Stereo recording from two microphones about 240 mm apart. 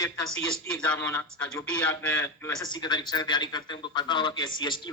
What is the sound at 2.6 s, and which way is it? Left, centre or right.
A woman's voice, centre.